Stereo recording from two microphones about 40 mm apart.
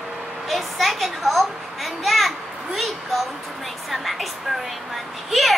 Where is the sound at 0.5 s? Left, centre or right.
Centre.